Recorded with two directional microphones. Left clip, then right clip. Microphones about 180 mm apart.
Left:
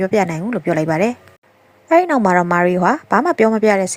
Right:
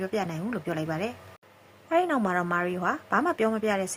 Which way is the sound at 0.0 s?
35° left (ahead or behind).